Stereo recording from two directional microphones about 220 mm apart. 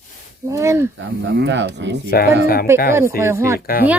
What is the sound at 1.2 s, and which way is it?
Speech, 50° right (ahead or behind).